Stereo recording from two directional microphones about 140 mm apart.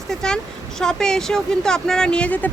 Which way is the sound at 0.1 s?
5° left (ahead or behind).